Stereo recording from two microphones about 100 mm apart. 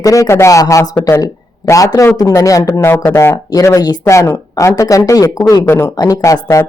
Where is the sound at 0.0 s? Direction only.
30° left (ahead or behind).